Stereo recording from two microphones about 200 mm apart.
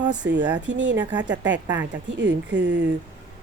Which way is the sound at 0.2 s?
65° right (ahead or behind).